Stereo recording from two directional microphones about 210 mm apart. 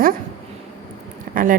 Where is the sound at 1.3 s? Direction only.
40° right (ahead or behind).